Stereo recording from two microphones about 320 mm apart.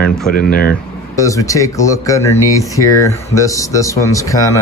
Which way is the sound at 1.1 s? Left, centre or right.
Centre.